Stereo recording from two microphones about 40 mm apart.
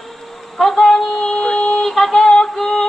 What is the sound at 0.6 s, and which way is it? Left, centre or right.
Female singing, centre.